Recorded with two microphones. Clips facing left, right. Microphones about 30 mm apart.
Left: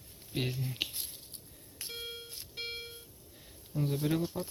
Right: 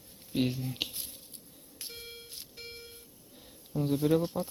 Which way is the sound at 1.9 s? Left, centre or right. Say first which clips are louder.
Left 6 dB; left.